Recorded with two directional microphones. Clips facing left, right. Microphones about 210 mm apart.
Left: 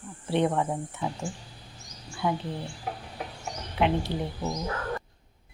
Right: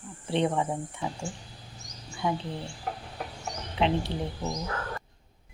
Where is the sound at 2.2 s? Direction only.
5° left (ahead or behind).